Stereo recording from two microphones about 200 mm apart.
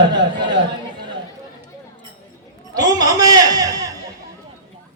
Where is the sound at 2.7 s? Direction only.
20° right (ahead or behind).